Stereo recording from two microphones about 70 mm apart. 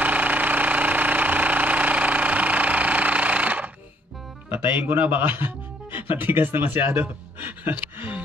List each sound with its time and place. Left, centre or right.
0.0 s engine: right
4.5 s speech: right
7.7 s gasp: right